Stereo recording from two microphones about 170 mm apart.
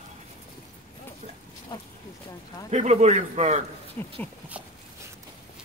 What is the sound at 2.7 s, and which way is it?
Speech, 40° right (ahead or behind).